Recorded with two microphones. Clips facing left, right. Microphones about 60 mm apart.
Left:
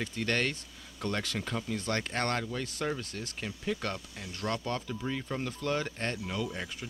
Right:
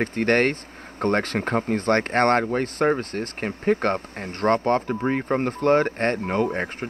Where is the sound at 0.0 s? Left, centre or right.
Right.